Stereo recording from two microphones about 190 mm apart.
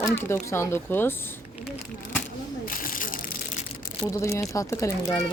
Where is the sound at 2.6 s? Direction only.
45° left (ahead or behind).